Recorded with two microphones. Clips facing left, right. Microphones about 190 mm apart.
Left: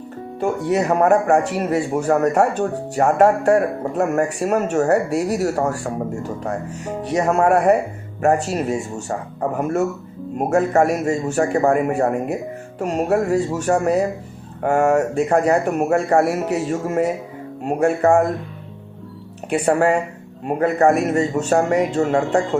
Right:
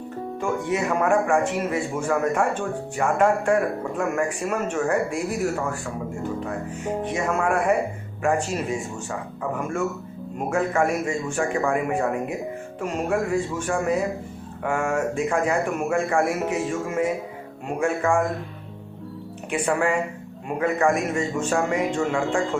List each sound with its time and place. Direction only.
0.3 s speech: 40° left (ahead or behind)
19.6 s speech: 40° left (ahead or behind)